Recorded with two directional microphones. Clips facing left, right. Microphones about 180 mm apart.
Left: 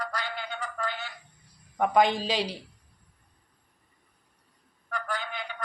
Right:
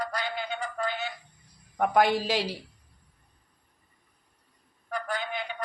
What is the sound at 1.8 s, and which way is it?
Speech, 10° right (ahead or behind).